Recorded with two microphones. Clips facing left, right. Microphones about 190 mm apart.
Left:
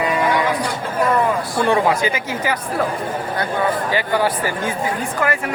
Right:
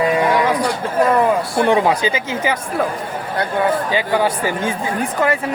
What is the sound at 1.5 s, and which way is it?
Speech, 20° right (ahead or behind).